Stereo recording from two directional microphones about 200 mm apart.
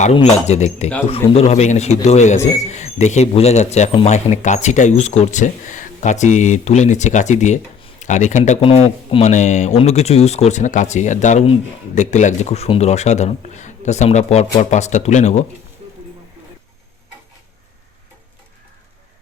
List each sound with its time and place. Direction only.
0.0 s speech: 30° left (ahead or behind)